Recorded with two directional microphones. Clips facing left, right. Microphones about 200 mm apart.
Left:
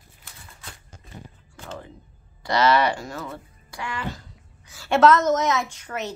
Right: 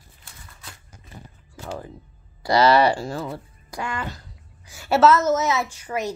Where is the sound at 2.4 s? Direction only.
35° right (ahead or behind).